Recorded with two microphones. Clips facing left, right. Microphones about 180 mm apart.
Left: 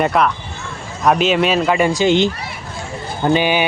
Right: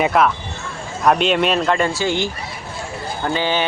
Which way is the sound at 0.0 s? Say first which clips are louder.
Even; centre (ahead or behind).